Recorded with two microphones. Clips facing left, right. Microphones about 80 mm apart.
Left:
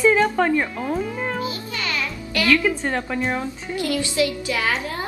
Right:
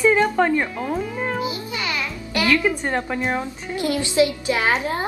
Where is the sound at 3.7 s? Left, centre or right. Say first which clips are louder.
Right 2 dB; right.